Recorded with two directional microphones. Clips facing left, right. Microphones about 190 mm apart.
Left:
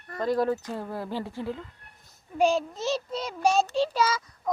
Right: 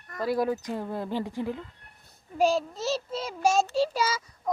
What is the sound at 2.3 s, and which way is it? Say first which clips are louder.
A child's voice: left 1 dB; centre (ahead or behind).